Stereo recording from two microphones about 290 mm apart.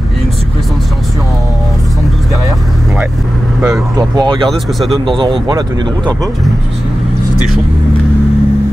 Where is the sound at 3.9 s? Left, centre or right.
Centre.